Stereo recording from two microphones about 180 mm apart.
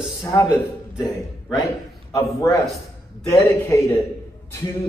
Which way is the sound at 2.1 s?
20° left (ahead or behind).